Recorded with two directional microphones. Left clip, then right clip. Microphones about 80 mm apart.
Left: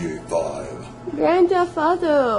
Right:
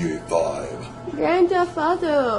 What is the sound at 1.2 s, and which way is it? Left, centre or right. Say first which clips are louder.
A woman's voice: left 2 dB; left.